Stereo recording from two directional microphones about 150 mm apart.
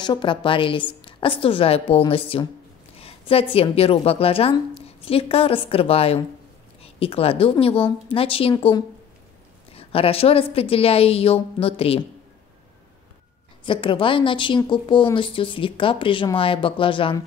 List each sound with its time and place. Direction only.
0.0 s a woman's voice: 30° left (ahead or behind)
9.8 s a woman's voice: 40° left (ahead or behind)
13.7 s a woman's voice: 35° left (ahead or behind)